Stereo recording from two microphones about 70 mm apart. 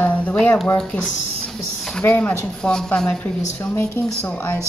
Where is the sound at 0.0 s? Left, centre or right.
Centre.